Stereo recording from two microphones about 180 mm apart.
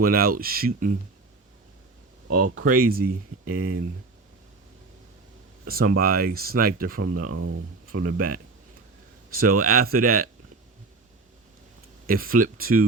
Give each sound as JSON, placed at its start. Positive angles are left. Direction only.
{"t": 0.0, "sound": "speech", "side_deg": -55}
{"t": 2.3, "sound": "speech", "side_deg": -55}
{"t": 5.6, "sound": "speech", "side_deg": -55}
{"t": 9.4, "sound": "speech", "side_deg": -55}
{"t": 12.0, "sound": "speech", "side_deg": -50}